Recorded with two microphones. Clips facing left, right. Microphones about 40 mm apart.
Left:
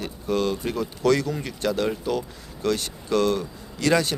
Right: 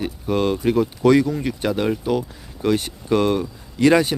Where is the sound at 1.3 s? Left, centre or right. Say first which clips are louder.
Right 6 dB; centre.